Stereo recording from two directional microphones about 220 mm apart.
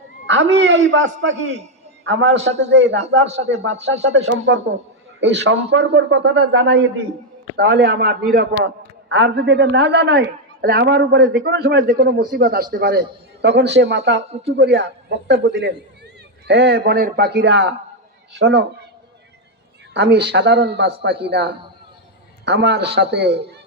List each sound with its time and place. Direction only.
0.3 s a man's voice: 55° right (ahead or behind)
14.2 s speech: 30° right (ahead or behind)
14.5 s a man's voice: 50° right (ahead or behind)
19.9 s a man's voice: 50° right (ahead or behind)